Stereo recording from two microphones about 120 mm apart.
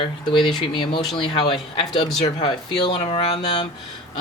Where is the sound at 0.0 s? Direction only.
45° left (ahead or behind).